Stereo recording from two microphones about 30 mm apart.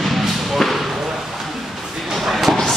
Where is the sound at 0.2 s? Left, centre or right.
Centre.